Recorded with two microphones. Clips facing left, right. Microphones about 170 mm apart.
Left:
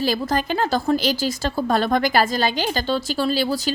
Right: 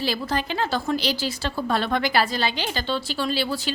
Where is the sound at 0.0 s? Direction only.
45° left (ahead or behind).